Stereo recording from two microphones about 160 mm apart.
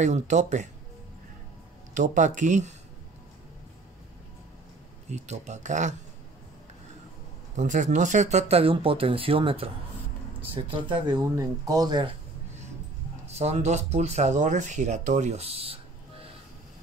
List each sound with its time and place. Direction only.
0.0 s speech: 50° right (ahead or behind)
2.0 s speech: 50° right (ahead or behind)
5.1 s speech: 45° right (ahead or behind)
7.5 s speech: 50° right (ahead or behind); by 12.1 s 25° right (ahead or behind)
13.3 s speech: 45° right (ahead or behind)